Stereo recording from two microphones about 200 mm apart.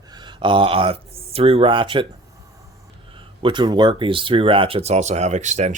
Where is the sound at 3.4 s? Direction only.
25° right (ahead or behind).